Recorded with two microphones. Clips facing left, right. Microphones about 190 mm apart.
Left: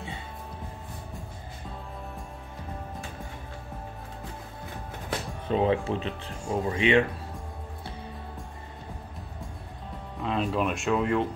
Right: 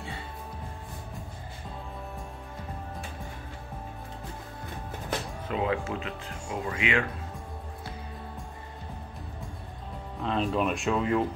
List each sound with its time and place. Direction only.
5.5 s speech: 30° left (ahead or behind)
10.2 s speech: centre (ahead or behind)